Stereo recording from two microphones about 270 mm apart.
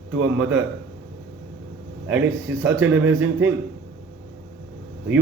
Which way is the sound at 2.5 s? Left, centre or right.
Centre.